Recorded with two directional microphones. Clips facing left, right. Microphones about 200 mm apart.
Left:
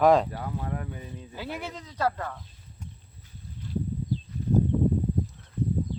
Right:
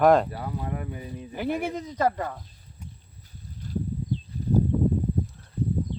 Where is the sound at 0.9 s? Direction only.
10° right (ahead or behind).